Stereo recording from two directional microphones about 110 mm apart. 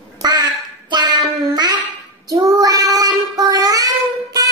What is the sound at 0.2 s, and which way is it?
Quack, 40° right (ahead or behind).